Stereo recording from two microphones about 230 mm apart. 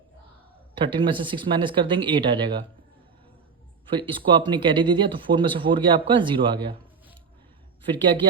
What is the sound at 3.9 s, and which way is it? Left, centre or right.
Speech, right.